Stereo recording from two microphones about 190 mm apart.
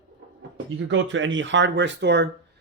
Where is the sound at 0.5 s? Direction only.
80° right.